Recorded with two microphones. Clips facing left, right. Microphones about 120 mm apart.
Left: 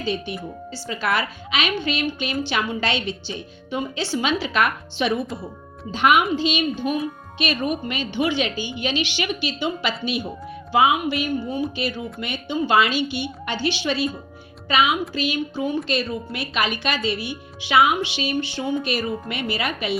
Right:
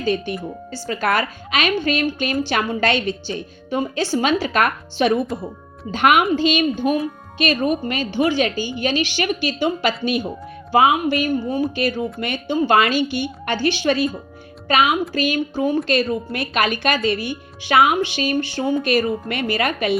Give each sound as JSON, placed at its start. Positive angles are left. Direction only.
{"t": 0.0, "sound": "a woman's voice", "side_deg": -45}
{"t": 5.9, "sound": "a woman's voice", "side_deg": -55}